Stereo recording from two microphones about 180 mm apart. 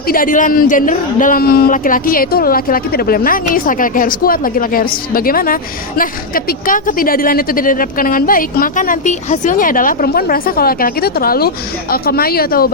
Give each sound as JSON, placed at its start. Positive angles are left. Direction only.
{"t": 0.1, "sound": "speech", "side_deg": 50}